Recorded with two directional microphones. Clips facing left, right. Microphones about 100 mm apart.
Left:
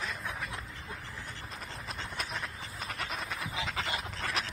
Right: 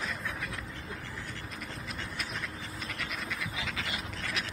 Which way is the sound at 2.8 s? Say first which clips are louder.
Left 2 dB; 35° left (ahead or behind).